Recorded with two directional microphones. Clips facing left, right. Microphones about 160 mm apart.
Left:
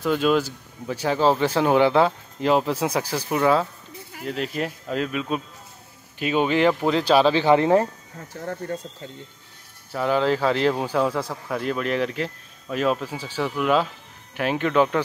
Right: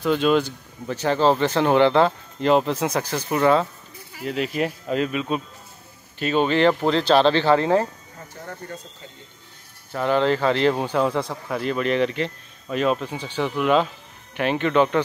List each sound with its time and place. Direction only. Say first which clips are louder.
0.0 s speech: right 1 dB; 5° left (ahead or behind)
7.5 s speech: left 1 dB; 20° left (ahead or behind)
8.3 s speech: left 6 dB; 70° left (ahead or behind)
9.9 s speech: right 1 dB; 5° left (ahead or behind)